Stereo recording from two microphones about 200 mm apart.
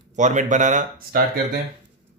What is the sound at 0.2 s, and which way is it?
Speech, 35° right (ahead or behind).